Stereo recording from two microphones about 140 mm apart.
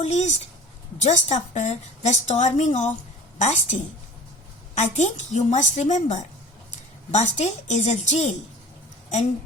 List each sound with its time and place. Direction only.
0.0 s a woman's voice: 55° left (ahead or behind)
4.8 s a woman's voice: 55° left (ahead or behind)